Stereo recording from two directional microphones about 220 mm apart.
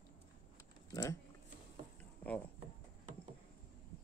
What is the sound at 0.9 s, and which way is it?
Speech, 15° left (ahead or behind).